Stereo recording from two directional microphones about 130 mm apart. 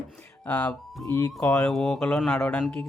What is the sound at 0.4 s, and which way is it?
Speech, 10° left (ahead or behind).